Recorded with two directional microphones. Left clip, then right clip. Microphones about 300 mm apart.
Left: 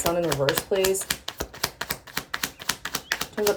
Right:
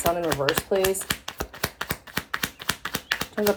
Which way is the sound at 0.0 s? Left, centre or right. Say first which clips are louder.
Even; centre.